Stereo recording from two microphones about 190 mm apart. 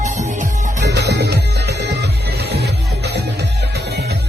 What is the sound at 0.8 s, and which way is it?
Music, 60° right (ahead or behind).